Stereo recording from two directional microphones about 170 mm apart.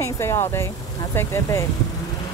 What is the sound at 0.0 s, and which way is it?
Speech, 15° left (ahead or behind).